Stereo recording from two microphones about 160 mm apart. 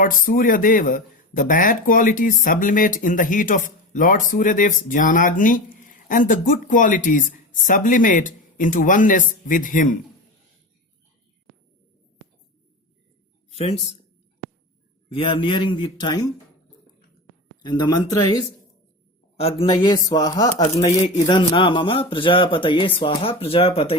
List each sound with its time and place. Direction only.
0.0 s speech: 55° left (ahead or behind)
13.6 s speech: 40° left (ahead or behind)
15.1 s speech: 35° left (ahead or behind)
17.6 s speech: 25° left (ahead or behind)
19.4 s speech: 35° left (ahead or behind)
19.7 s speech: 25° left (ahead or behind)